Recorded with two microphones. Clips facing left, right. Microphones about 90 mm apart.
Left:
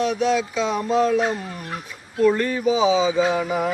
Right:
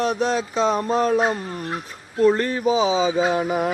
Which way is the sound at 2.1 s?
35° right (ahead or behind).